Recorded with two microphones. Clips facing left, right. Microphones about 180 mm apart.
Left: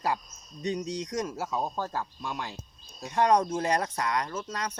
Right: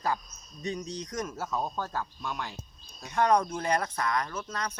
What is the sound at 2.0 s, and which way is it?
Speech, 25° left (ahead or behind).